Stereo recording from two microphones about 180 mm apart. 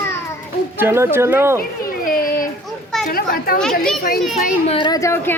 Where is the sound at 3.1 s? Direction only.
55° left (ahead or behind).